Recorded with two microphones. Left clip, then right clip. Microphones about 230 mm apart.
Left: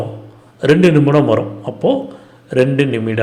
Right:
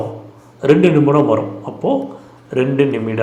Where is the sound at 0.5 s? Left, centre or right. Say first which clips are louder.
Even; left.